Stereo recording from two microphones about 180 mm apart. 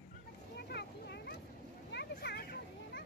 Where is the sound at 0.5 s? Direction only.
65° left (ahead or behind).